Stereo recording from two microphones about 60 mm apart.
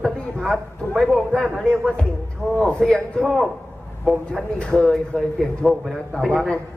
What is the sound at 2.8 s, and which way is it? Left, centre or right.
Speech, centre.